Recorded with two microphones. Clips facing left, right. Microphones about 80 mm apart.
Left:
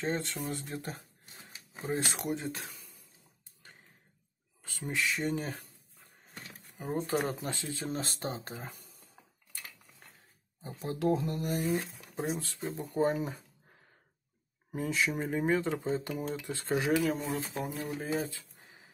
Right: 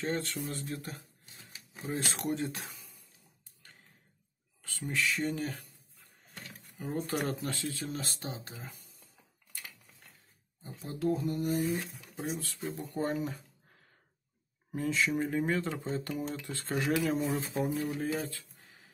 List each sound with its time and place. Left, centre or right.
0.0 s speech: left
1.7 s a sound: left
2.1 s speech: centre
4.6 s speech: centre
6.8 s speech: centre; by 8.8 s left
10.6 s speech: left
11.8 s speech: centre
12.3 s speech: left
14.7 s speech: centre
16.9 s speech: centre
18.1 s a sound: left